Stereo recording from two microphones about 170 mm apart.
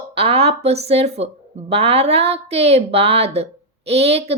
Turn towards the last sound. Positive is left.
turn(degrees=-35)  # may be behind; listen again after turning